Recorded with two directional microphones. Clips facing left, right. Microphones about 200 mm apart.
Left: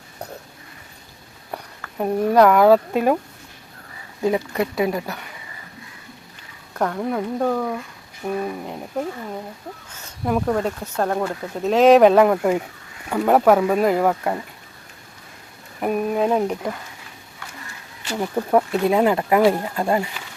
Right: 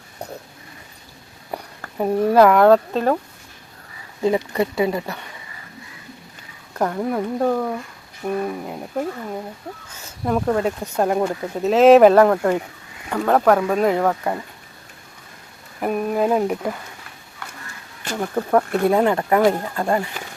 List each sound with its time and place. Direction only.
2.0 s speech: 5° right (ahead or behind)
4.2 s speech: 5° left (ahead or behind)
6.7 s speech: 5° right (ahead or behind)
10.2 s speech: centre (ahead or behind)
15.8 s speech: centre (ahead or behind)
18.0 s speech: 50° right (ahead or behind)
18.9 s speech: 5° left (ahead or behind)